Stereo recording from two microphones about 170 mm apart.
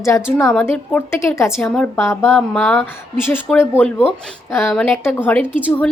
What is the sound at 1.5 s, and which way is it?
Speech, 5° left (ahead or behind).